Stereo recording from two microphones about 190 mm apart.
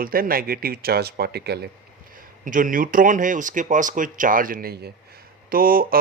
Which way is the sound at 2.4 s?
45° right (ahead or behind).